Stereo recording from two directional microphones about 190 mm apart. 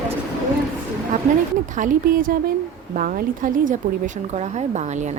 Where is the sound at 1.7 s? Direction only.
45° right (ahead or behind).